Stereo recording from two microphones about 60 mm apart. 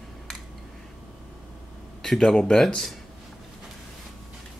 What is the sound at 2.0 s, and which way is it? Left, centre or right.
Speech, centre.